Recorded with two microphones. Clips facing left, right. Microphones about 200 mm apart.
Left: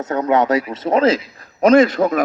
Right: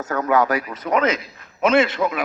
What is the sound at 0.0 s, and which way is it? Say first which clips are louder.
A man's voice: left 3 dB; 20° left (ahead or behind).